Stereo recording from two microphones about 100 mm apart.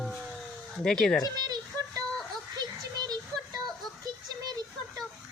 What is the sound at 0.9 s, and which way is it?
Speech, 5° left (ahead or behind).